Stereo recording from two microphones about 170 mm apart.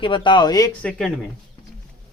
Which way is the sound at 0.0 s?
30° left (ahead or behind).